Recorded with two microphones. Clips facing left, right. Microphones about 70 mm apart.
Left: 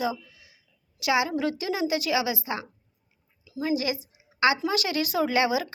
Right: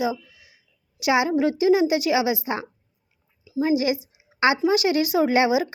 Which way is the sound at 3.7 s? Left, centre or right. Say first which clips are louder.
Right 4 dB; right.